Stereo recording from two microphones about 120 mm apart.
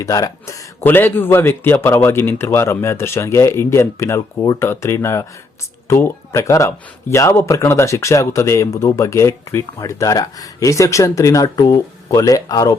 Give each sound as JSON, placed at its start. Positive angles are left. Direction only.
{"t": 0.0, "sound": "speech", "side_deg": 30}
{"t": 0.8, "sound": "speech", "side_deg": 15}